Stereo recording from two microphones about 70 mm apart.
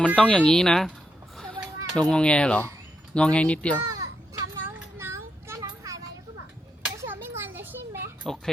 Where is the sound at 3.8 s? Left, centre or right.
Right.